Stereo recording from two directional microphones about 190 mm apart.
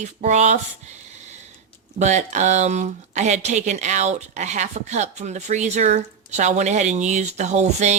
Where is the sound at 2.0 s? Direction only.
40° right (ahead or behind).